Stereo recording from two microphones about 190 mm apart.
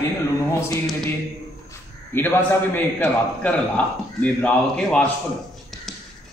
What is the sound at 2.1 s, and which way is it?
A man's voice, 10° left (ahead or behind).